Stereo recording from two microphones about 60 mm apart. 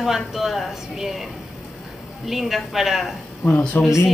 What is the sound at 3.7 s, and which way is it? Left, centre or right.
Speech, left.